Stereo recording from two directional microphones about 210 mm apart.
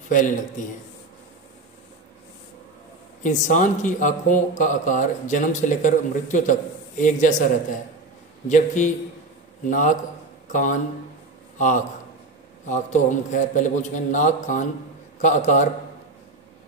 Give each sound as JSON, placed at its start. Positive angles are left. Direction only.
{"t": 0.1, "sound": "speech", "side_deg": 40}
{"t": 3.2, "sound": "speech", "side_deg": 35}
{"t": 8.5, "sound": "a man's voice", "side_deg": 35}